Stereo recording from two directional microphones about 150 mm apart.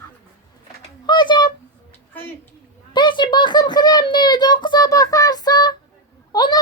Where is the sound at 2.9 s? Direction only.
30° left (ahead or behind).